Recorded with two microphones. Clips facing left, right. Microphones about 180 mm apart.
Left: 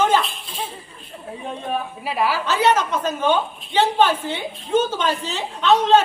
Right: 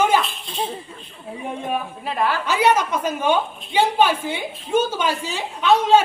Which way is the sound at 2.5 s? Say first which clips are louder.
Right 1 dB; 10° right (ahead or behind).